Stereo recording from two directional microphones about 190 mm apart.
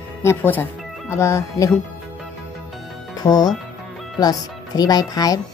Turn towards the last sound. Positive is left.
turn(degrees=20)  # may be behind; listen again after turning